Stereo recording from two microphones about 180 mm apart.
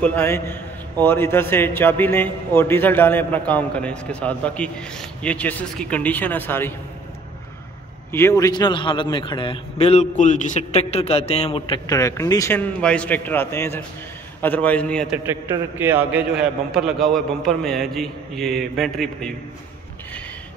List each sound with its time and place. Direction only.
0.0 s a man's voice: 10° left (ahead or behind)
8.1 s a man's voice: 15° left (ahead or behind)
15.8 s a man's voice: 10° right (ahead or behind)